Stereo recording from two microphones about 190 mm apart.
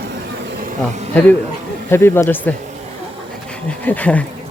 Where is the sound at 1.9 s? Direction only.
10° left (ahead or behind).